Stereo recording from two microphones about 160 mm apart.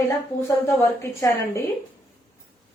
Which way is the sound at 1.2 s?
15° left (ahead or behind).